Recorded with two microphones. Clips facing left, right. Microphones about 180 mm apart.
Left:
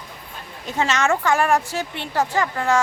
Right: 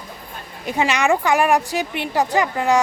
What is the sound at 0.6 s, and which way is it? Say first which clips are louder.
A woman's voice: right 2 dB; 15° right (ahead or behind).